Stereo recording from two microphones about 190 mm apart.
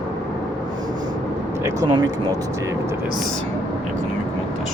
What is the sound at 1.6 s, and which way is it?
Speech, 20° right (ahead or behind).